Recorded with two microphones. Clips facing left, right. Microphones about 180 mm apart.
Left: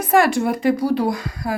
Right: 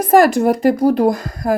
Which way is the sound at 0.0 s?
40° right (ahead or behind).